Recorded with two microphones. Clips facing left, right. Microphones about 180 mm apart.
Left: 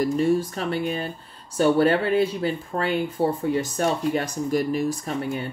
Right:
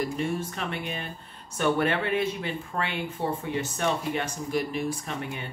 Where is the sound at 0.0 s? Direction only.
35° left (ahead or behind).